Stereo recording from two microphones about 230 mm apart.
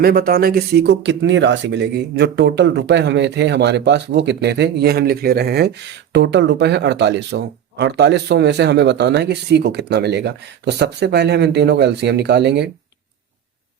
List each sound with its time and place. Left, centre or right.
0.0 s speech: right